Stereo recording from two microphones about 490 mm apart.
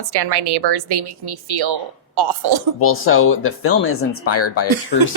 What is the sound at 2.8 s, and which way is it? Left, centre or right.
Speech, left.